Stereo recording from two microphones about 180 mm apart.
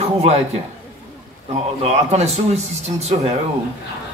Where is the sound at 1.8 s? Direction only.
35° right (ahead or behind).